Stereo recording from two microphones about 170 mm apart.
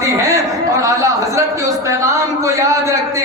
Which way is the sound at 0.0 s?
20° right (ahead or behind).